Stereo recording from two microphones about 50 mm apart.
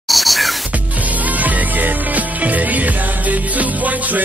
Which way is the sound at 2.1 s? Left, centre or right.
Right.